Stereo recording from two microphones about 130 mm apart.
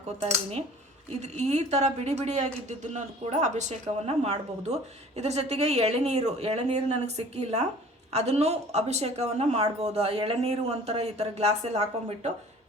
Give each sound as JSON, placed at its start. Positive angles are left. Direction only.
{"t": 1.2, "sound": "speech", "side_deg": -60}